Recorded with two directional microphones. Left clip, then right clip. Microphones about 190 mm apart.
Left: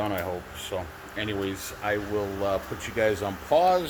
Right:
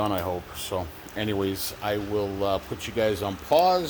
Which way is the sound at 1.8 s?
30° right (ahead or behind).